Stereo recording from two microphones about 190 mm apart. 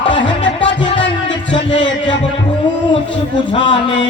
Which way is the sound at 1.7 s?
75° left (ahead or behind).